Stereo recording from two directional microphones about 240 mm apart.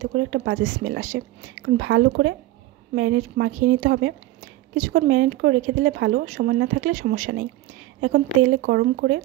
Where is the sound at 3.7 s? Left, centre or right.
Right.